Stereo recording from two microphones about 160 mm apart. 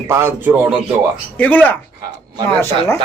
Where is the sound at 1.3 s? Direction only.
10° left (ahead or behind).